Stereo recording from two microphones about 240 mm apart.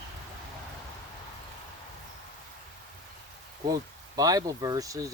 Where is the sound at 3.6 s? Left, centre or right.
Centre.